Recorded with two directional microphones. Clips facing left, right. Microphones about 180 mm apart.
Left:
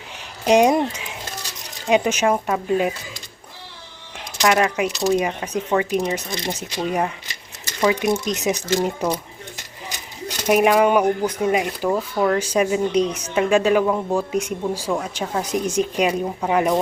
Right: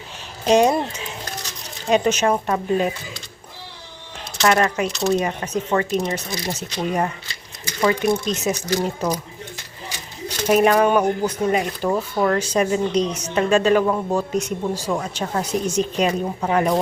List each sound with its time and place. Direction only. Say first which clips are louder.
0.4 s speech: left 1 dB; 15° left (ahead or behind)
4.4 s speech: even; 10° left (ahead or behind)
10.2 s speech: even; 10° left (ahead or behind)